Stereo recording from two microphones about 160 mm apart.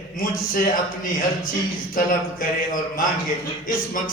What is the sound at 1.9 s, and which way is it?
A man's voice, 60° left (ahead or behind).